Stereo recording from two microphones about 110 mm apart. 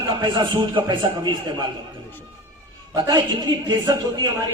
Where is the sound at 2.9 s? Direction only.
40° right (ahead or behind).